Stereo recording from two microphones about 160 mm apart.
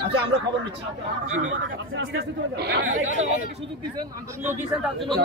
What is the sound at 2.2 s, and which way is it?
Speech, 90° right.